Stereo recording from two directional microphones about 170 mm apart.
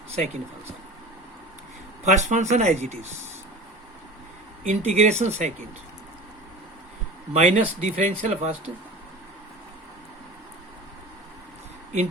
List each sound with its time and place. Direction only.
2.0 s speech: 45° right (ahead or behind)
4.6 s speech: 45° right (ahead or behind)
7.3 s speech: 45° right (ahead or behind)